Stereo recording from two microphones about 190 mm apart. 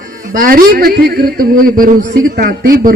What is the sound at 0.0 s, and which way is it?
A man's voice, 45° right (ahead or behind).